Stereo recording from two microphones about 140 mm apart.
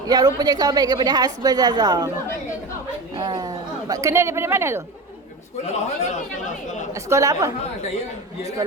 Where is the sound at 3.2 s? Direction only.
30° right (ahead or behind).